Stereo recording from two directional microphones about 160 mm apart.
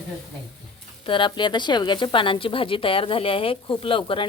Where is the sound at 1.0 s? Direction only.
30° left (ahead or behind).